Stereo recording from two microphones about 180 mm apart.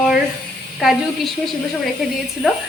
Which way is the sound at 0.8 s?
Centre (ahead or behind).